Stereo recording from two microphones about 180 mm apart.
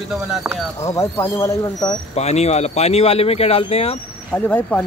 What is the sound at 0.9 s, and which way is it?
Speech, 20° left (ahead or behind).